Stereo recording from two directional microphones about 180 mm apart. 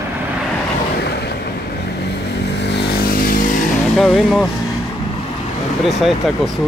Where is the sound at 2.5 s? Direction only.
70° left (ahead or behind); by 3.5 s 55° left (ahead or behind).